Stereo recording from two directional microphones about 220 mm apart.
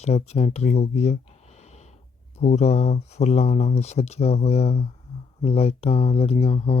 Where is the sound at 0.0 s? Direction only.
30° left (ahead or behind).